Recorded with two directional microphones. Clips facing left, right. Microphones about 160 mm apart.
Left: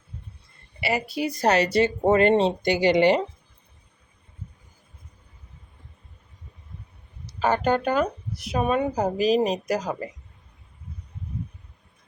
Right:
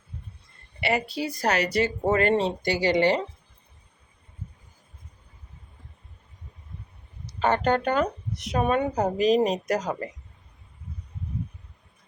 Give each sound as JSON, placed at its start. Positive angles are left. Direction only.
{"t": 0.8, "sound": "a woman's voice", "side_deg": 5}
{"t": 1.4, "sound": "speech", "side_deg": 25}
{"t": 7.3, "sound": "speech", "side_deg": 5}